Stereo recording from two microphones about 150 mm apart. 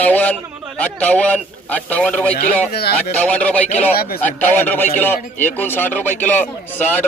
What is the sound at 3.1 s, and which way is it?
Speech, 10° left (ahead or behind).